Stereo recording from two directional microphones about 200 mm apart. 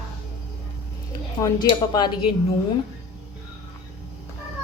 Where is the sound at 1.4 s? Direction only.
20° left (ahead or behind).